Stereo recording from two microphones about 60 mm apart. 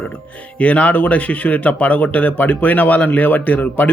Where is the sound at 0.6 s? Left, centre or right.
Left.